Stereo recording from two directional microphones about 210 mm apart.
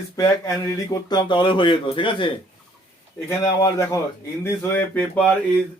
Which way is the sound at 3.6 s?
15° left (ahead or behind).